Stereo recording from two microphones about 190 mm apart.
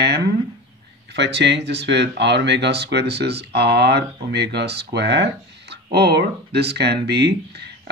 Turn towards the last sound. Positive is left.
turn(degrees=-60)  # may be behind; listen again after turning